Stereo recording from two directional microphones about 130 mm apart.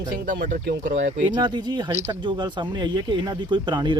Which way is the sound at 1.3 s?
35° right (ahead or behind).